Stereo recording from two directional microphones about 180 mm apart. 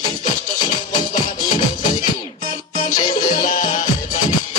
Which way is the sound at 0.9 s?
20° left (ahead or behind).